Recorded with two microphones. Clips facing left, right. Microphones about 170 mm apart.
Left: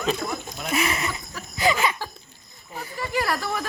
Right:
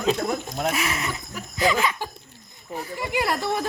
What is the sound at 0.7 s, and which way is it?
Speech, centre (ahead or behind).